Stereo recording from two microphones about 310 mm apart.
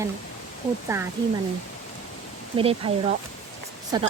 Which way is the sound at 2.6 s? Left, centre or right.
Centre.